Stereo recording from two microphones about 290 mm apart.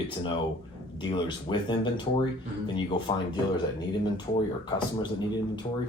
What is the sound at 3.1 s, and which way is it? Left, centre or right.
Speech, centre.